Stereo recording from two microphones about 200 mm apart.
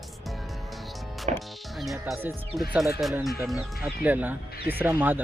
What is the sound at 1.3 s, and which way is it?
Music, 35° right (ahead or behind).